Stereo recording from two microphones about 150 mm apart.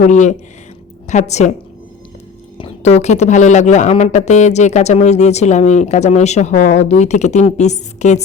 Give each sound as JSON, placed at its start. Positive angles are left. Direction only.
{"t": 0.0, "sound": "speech", "side_deg": 55}
{"t": 2.6, "sound": "speech", "side_deg": 40}